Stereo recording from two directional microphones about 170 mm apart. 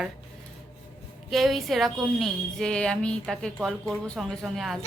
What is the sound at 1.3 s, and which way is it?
A woman's voice, centre (ahead or behind).